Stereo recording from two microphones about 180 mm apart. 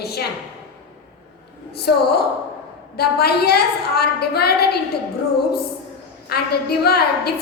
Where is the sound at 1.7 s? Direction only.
60° left (ahead or behind).